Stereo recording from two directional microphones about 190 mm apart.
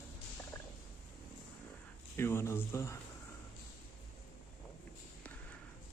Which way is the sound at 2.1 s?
15° left (ahead or behind).